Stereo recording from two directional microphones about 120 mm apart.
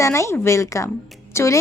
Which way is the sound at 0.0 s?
25° left (ahead or behind).